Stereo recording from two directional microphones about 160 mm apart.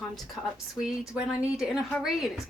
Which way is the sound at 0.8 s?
5° right (ahead or behind).